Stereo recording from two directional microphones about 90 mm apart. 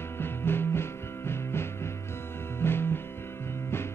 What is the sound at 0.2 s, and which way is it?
Music, 25° left (ahead or behind).